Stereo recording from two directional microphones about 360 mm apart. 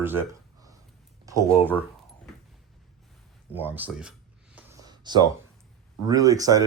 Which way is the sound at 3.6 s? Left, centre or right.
Centre.